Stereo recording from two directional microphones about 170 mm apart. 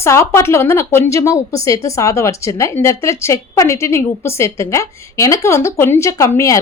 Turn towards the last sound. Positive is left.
turn(degrees=20)  # may be behind; listen again after turning